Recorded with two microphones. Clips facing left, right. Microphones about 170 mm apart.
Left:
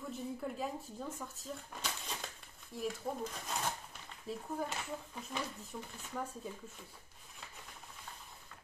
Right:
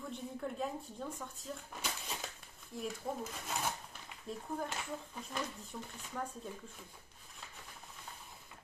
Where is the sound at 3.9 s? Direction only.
Centre (ahead or behind).